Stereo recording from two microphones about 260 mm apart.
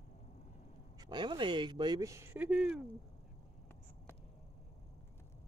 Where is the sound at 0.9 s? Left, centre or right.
Centre.